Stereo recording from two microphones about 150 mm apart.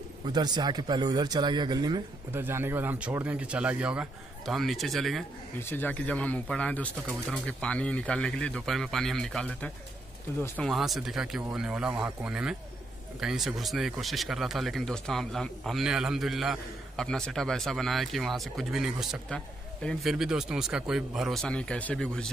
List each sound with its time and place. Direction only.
0.3 s speech: 30° right (ahead or behind)
2.3 s speech: 15° right (ahead or behind); by 5.2 s centre (ahead or behind)
5.6 s speech: 15° left (ahead or behind)